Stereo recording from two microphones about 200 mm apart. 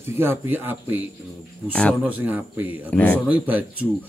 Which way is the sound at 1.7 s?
5° left (ahead or behind).